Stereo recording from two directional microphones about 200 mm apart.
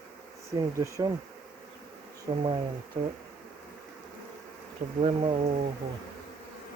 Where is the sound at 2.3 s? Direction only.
30° right (ahead or behind).